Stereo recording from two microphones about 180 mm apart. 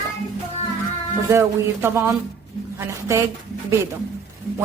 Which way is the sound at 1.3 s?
15° right (ahead or behind).